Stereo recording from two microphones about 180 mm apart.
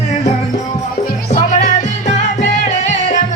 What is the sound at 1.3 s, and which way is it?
Music, 45° left (ahead or behind).